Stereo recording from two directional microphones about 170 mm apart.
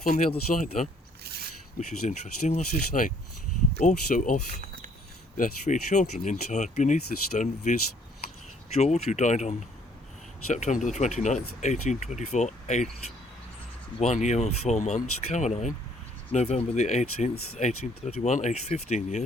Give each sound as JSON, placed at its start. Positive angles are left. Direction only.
{"t": 0.0, "sound": "speech", "side_deg": 50}
{"t": 1.2, "sound": "a sound", "side_deg": -70}
{"t": 2.0, "sound": "speech", "side_deg": 45}
{"t": 5.4, "sound": "speech", "side_deg": 45}